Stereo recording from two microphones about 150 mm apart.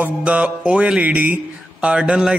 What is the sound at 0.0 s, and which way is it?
Speech, 10° right (ahead or behind).